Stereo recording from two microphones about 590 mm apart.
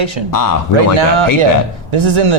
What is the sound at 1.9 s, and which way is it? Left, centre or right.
Speech, right.